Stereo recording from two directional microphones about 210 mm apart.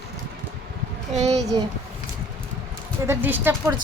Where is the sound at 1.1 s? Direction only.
30° right (ahead or behind).